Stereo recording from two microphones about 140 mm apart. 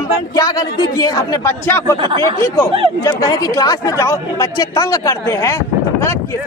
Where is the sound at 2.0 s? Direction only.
35° right (ahead or behind).